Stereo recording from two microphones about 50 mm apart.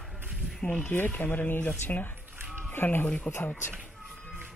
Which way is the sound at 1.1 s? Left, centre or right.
Left.